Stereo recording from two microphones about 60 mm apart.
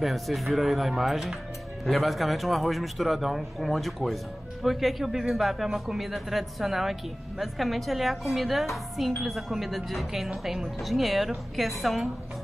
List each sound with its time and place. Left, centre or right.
0.0 s speech: centre